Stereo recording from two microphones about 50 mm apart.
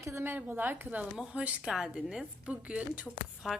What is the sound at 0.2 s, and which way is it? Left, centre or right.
Speech, right.